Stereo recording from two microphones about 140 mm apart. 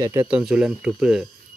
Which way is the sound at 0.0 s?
20° right (ahead or behind).